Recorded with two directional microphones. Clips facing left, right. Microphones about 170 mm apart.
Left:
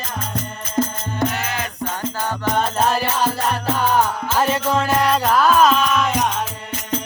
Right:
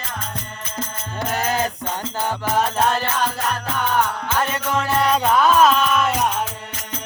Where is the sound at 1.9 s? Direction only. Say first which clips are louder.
Even; 15° right (ahead or behind).